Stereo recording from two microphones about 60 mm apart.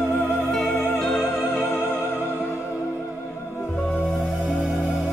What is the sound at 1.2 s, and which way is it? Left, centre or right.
Music, left.